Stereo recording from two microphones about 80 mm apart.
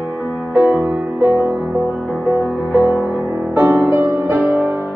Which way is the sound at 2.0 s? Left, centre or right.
Centre.